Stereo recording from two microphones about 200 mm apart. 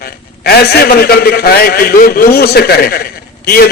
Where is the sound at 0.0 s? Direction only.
50° left (ahead or behind).